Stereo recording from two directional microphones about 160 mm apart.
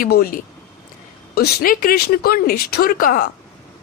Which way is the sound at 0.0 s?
65° left (ahead or behind).